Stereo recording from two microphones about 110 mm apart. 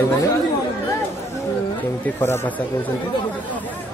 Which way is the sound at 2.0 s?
20° left (ahead or behind).